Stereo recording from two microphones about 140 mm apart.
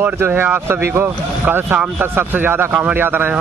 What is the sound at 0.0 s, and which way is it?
Speech, 15° right (ahead or behind).